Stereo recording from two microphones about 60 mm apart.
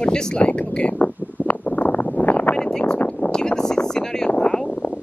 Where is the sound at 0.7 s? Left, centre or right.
Left.